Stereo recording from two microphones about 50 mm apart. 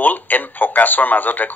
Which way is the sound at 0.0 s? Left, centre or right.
Left.